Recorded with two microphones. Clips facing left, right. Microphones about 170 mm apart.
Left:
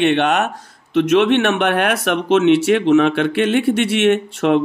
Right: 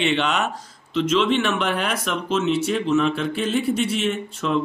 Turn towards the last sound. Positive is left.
turn(degrees=70)  # may be behind; listen again after turning